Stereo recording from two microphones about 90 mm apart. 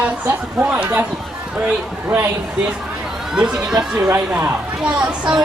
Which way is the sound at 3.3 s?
10° right (ahead or behind).